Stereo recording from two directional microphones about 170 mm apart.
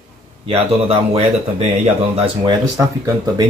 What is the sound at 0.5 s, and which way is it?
Speech, 35° right (ahead or behind).